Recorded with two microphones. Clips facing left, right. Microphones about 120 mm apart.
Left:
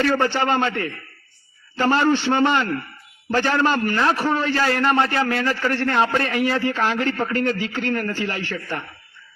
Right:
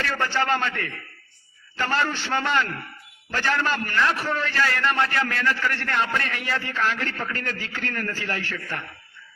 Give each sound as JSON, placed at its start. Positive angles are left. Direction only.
{"t": 0.0, "sound": "a man's voice", "side_deg": 35}
{"t": 8.4, "sound": "a man's voice", "side_deg": 35}